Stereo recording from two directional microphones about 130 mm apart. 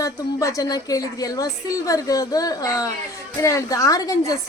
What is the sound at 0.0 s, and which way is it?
A woman's voice, 25° left (ahead or behind).